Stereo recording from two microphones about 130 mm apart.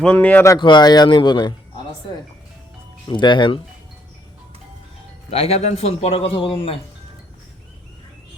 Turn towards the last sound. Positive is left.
turn(degrees=45)  # may be behind; listen again after turning